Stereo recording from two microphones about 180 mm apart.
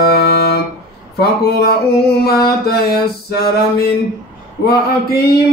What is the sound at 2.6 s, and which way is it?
Mantra, 60° left (ahead or behind).